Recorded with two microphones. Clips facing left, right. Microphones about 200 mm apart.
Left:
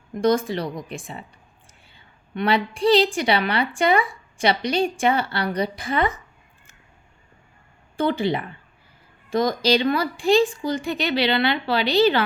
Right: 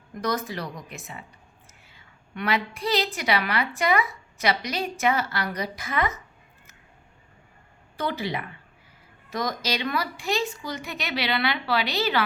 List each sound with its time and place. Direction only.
0.2 s a woman's voice: 30° left (ahead or behind)
7.9 s a woman's voice: 30° left (ahead or behind)